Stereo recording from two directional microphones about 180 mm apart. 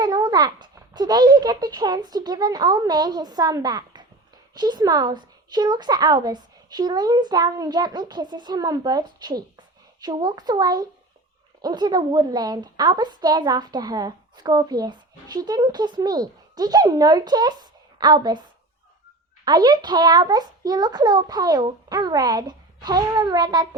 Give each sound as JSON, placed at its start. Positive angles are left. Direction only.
{"t": 0.0, "sound": "a woman's voice", "side_deg": -20}
{"t": 19.5, "sound": "a woman's voice", "side_deg": -20}